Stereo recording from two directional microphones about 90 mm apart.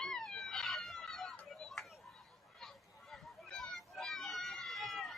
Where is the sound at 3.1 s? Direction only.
5° left (ahead or behind).